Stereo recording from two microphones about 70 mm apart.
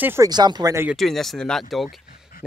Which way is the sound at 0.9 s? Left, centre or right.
Centre.